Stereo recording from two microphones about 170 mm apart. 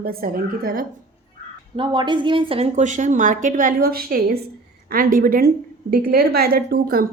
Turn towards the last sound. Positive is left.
turn(degrees=-60)  # may be behind; listen again after turning